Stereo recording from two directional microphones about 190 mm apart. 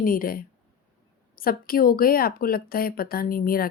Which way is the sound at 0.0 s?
50° left (ahead or behind).